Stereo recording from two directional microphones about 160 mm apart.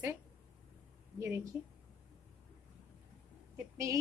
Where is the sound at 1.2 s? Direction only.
20° right (ahead or behind).